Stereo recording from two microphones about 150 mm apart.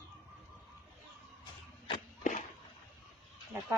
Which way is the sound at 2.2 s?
55° left (ahead or behind).